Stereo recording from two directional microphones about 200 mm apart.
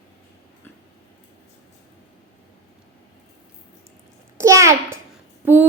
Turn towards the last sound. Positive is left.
turn(degrees=-10)  # may be behind; listen again after turning